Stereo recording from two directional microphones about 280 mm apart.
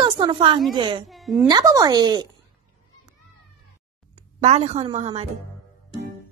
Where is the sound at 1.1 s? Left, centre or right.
Centre.